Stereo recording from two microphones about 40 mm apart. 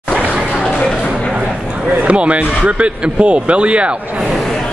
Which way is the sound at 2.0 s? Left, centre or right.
Right.